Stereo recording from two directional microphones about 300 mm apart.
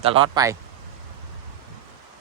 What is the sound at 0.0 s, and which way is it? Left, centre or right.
Speech, centre.